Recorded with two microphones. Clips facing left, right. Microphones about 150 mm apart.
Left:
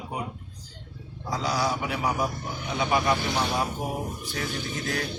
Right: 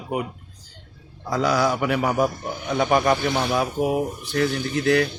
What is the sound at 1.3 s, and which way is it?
A man's voice, 55° right (ahead or behind).